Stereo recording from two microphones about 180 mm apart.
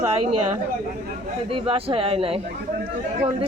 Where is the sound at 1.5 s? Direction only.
30° right (ahead or behind).